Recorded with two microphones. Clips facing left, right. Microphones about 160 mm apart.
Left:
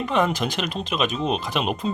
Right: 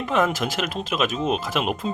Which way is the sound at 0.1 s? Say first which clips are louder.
Right 1 dB; centre (ahead or behind).